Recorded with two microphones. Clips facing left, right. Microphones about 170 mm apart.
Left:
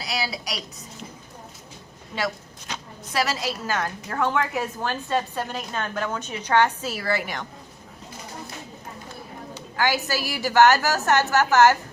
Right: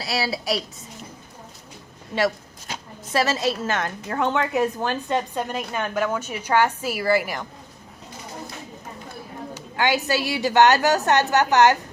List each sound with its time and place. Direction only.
0.0 s a woman's voice: 30° right (ahead or behind)
2.7 s a woman's voice: 25° right (ahead or behind); by 7.4 s 5° right (ahead or behind)
9.7 s a woman's voice: 20° right (ahead or behind)